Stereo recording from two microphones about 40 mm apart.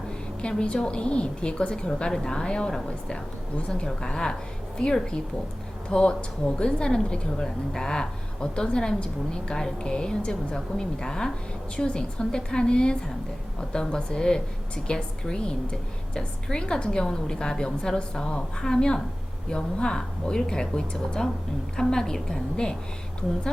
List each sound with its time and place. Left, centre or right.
0.4 s a woman's voice: left